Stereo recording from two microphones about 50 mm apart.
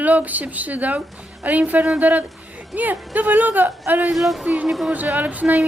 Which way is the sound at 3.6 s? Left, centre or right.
Right.